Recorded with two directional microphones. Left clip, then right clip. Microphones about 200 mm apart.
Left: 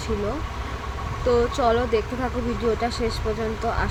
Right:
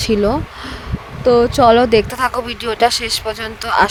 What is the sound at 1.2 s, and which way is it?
Speech, 45° right (ahead or behind).